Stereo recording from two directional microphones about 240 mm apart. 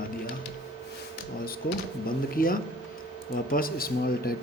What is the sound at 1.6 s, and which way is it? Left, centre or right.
A man's voice, left.